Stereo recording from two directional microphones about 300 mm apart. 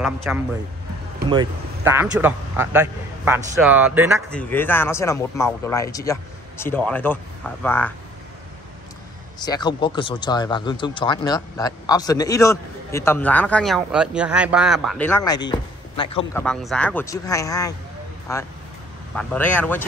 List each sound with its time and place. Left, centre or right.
0.0 s speech: centre
4.4 s speech: centre
9.4 s speech: centre
16.3 s speech: centre
19.1 s speech: centre